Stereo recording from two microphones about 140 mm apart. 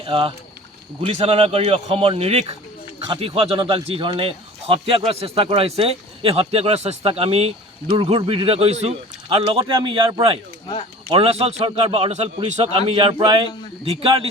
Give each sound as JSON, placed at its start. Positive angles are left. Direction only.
{"t": 0.0, "sound": "speech", "side_deg": -40}